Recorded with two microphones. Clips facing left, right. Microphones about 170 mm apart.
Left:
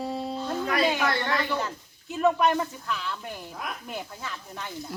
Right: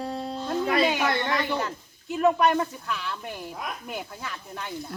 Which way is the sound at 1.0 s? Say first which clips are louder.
Right 1 dB; 20° right (ahead or behind).